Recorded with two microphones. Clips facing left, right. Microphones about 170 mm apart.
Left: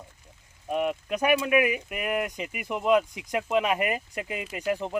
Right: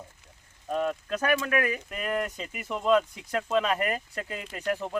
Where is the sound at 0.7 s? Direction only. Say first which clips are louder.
Left 1 dB; 15° left (ahead or behind).